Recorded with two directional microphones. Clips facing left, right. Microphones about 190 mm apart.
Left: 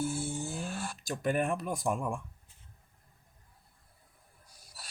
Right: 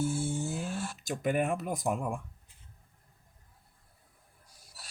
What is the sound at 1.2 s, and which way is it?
Speech, 15° right (ahead or behind).